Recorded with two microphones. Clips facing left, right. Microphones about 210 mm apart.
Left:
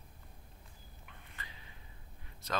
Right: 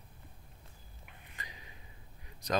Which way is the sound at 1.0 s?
15° right (ahead or behind).